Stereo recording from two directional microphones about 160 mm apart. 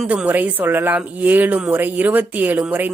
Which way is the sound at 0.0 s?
5° right (ahead or behind).